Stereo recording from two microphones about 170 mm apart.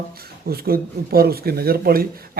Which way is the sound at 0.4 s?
65° right (ahead or behind).